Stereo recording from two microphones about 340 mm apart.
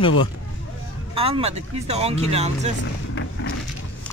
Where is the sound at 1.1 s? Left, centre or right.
Centre.